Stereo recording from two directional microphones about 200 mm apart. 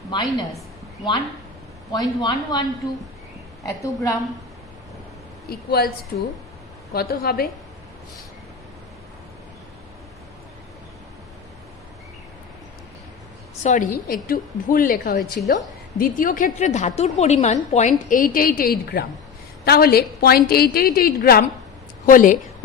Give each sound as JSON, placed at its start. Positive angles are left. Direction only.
{"t": 0.1, "sound": "speech", "side_deg": 20}
{"t": 1.9, "sound": "a woman's voice", "side_deg": 20}
{"t": 5.5, "sound": "a woman's voice", "side_deg": 50}
{"t": 13.6, "sound": "a woman's voice", "side_deg": 35}